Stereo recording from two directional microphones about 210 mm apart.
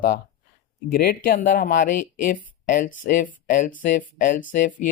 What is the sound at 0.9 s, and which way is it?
Speech, 45° left (ahead or behind).